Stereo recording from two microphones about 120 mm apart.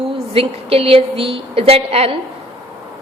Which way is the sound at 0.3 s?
55° right (ahead or behind).